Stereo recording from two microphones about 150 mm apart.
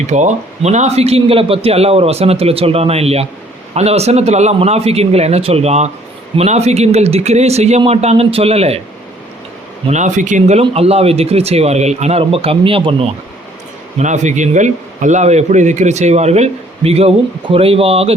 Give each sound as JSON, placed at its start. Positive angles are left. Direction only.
{"t": 0.1, "sound": "a man's voice", "side_deg": -50}
{"t": 9.9, "sound": "a man's voice", "side_deg": -55}
{"t": 14.0, "sound": "a man's voice", "side_deg": -55}